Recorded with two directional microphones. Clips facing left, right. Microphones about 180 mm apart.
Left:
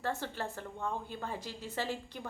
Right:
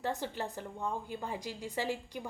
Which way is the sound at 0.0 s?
15° right (ahead or behind).